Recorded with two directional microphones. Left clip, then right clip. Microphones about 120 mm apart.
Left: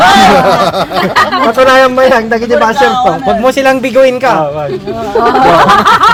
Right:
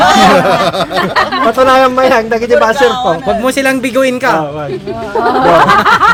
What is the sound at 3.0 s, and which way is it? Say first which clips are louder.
Speech: left 3 dB; 30° right (ahead or behind).